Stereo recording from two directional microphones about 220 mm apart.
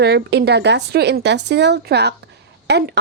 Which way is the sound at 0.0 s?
50° right (ahead or behind).